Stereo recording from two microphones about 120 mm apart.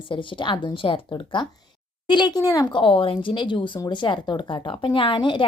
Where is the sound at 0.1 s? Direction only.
45° left (ahead or behind).